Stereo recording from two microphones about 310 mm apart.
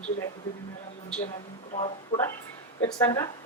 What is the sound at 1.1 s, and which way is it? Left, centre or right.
Speech, centre.